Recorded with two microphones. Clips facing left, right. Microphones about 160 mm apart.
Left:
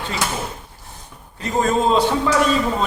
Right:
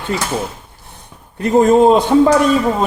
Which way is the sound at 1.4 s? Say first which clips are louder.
Right 9 dB; 55° right (ahead or behind).